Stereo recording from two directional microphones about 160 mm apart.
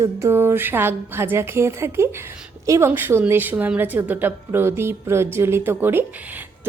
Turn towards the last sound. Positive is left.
turn(degrees=-15)  # may be behind; listen again after turning